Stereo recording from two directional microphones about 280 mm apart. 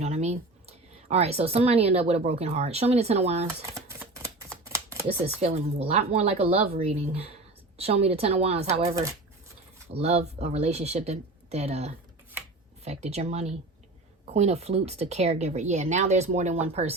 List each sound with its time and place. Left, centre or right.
0.0 s speech: right
3.8 s a sound: centre
5.4 s speech: right